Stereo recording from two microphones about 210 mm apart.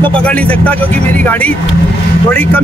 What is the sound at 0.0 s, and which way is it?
Speech, 5° left (ahead or behind).